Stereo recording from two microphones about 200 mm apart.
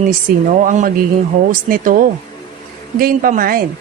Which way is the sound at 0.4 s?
40° right (ahead or behind).